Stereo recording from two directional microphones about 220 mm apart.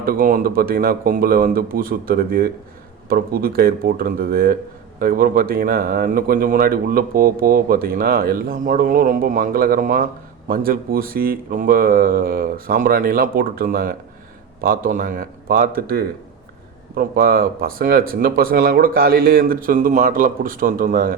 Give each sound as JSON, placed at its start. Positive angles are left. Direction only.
{"t": 0.0, "sound": "speech", "side_deg": -40}